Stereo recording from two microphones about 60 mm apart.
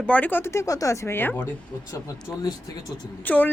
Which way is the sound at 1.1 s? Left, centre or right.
Left.